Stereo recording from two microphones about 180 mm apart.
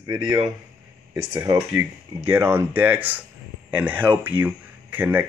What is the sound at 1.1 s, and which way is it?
Speech, 15° right (ahead or behind).